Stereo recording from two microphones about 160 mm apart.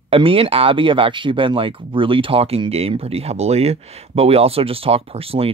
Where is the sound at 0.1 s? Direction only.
35° right (ahead or behind).